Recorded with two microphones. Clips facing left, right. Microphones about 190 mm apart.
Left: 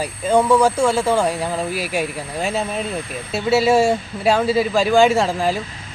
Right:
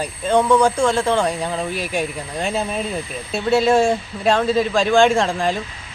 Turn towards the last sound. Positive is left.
turn(degrees=5)  # may be behind; listen again after turning